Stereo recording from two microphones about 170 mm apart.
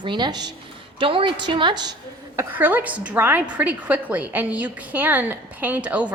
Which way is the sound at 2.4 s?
10° right (ahead or behind).